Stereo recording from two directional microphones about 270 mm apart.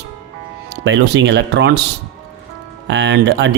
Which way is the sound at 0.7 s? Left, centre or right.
Right.